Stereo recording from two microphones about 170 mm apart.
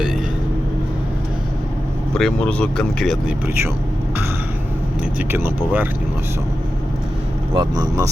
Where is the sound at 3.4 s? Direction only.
15° right (ahead or behind).